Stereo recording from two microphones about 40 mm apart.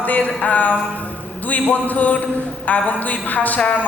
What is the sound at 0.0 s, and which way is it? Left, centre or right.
Music, left.